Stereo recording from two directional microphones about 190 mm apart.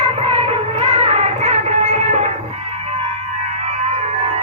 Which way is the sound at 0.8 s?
30° right (ahead or behind).